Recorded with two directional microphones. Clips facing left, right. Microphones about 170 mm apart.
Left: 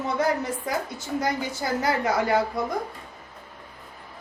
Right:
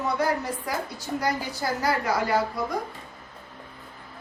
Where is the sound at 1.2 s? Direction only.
25° left (ahead or behind).